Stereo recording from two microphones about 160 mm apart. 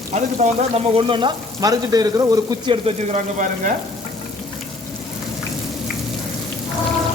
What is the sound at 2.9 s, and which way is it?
Speech, 50° right (ahead or behind).